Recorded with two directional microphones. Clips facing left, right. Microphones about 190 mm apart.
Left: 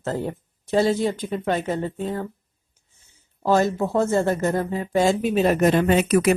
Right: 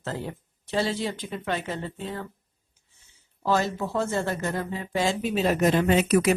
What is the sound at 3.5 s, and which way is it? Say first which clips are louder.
Speech: left 5 dB; 45° left (ahead or behind).